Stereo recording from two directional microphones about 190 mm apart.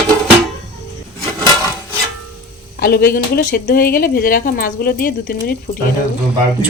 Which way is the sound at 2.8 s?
55° left (ahead or behind).